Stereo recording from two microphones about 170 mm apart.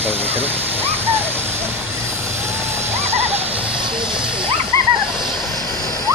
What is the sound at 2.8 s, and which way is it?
Owl, 40° right (ahead or behind).